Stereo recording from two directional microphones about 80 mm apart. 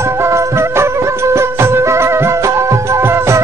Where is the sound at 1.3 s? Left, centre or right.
Right.